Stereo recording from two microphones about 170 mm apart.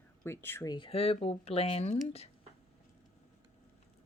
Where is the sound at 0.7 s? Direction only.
35° left (ahead or behind).